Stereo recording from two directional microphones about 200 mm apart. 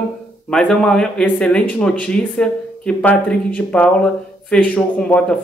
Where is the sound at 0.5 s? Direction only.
5° left (ahead or behind).